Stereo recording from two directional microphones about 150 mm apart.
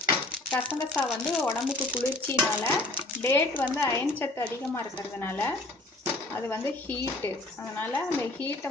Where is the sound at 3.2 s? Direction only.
15° left (ahead or behind).